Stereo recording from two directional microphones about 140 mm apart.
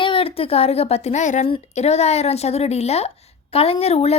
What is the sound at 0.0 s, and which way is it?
A woman's voice, 40° left (ahead or behind).